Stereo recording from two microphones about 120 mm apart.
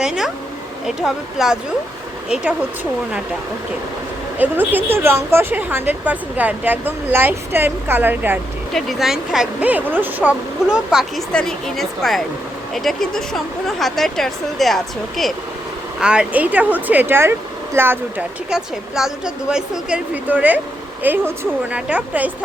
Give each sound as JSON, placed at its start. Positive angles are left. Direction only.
{"t": 0.0, "sound": "speech", "side_deg": -5}
{"t": 4.4, "sound": "a woman's voice", "side_deg": -15}
{"t": 8.7, "sound": "speech", "side_deg": 0}
{"t": 11.3, "sound": "a woman's voice", "side_deg": 5}
{"t": 18.5, "sound": "a woman's voice", "side_deg": -5}